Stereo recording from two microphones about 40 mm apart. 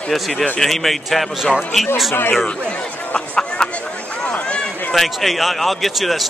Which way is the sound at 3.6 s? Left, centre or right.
Centre.